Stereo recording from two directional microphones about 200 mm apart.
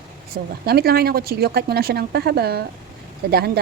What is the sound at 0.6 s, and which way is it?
A woman's voice, 50° right (ahead or behind).